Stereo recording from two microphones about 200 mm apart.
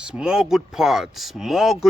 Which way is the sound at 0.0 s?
5° right (ahead or behind).